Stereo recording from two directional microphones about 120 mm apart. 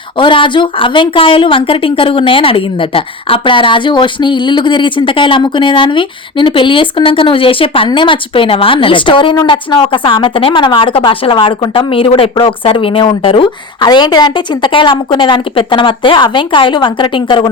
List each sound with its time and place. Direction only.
0.2 s a woman's voice: 45° left (ahead or behind)
13.8 s a woman's voice: 35° left (ahead or behind)